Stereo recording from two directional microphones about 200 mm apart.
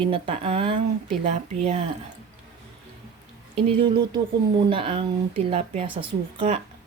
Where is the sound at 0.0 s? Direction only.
25° right (ahead or behind).